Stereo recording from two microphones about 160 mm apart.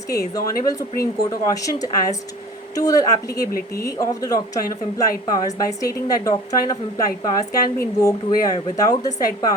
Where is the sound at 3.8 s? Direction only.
20° left (ahead or behind).